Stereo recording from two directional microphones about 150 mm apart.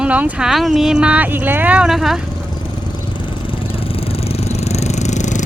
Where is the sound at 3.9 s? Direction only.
40° left (ahead or behind).